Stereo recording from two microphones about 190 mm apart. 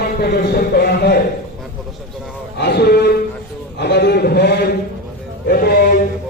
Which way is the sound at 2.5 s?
60° left (ahead or behind).